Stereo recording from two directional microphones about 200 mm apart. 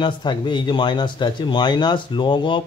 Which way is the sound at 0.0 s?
25° left (ahead or behind).